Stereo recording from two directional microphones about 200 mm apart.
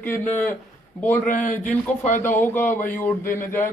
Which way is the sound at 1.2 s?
35° left (ahead or behind).